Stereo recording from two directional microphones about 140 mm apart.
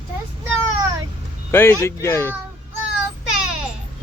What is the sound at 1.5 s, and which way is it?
Speech, 15° left (ahead or behind).